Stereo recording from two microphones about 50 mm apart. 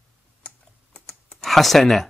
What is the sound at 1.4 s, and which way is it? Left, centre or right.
Speech, centre.